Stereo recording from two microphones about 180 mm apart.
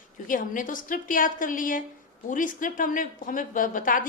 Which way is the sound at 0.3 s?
50° left (ahead or behind).